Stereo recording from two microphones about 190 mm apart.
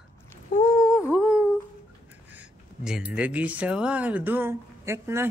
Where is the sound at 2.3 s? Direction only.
5° right (ahead or behind).